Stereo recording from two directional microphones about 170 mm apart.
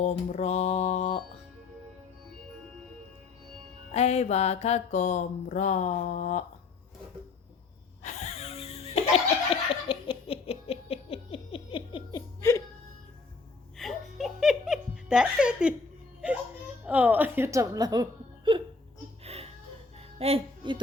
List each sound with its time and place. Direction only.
0.0 s mantra: 40° left (ahead or behind)
3.9 s mantra: 40° left (ahead or behind)
8.0 s wheeze: 40° left (ahead or behind)
9.5 s laughter: 30° left (ahead or behind)
12.4 s music: 20° left (ahead or behind)
13.7 s giggle: centre (ahead or behind)
16.8 s a woman's voice: 10° right (ahead or behind); by 18.6 s 25° right (ahead or behind)
19.2 s a sound: 35° right (ahead or behind)
20.0 s music: 35° right (ahead or behind)